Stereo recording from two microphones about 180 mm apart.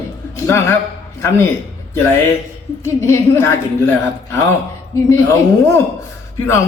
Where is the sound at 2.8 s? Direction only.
15° left (ahead or behind).